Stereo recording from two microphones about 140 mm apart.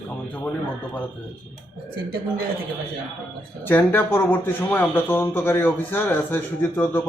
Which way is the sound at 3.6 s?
15° left (ahead or behind).